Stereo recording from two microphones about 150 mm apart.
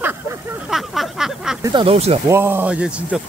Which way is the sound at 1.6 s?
30° right (ahead or behind).